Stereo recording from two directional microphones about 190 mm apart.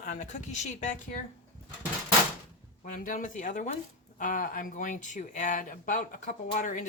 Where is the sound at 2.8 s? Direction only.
45° left (ahead or behind).